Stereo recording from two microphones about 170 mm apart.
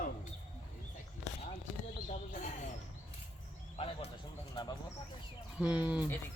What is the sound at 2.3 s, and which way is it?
Speech, 45° left (ahead or behind).